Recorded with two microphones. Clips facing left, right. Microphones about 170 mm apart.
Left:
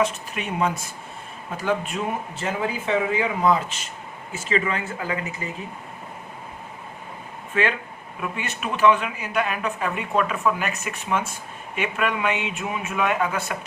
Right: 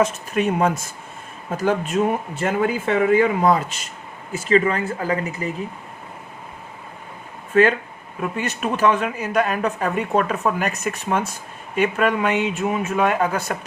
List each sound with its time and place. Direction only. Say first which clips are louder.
0.0 s speech: right 5 dB; 45° right (ahead or behind)
7.5 s speech: right 8 dB; 40° right (ahead or behind)